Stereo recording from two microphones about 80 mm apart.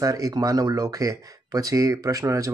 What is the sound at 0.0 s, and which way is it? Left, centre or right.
Speech, right.